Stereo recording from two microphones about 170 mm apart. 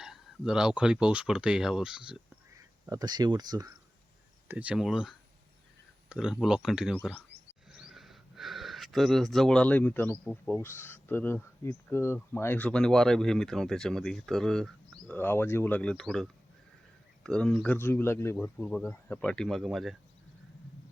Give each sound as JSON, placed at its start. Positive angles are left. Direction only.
{"t": 0.0, "sound": "speech", "side_deg": -5}
{"t": 2.8, "sound": "speech", "side_deg": -20}
{"t": 4.4, "sound": "speech", "side_deg": -5}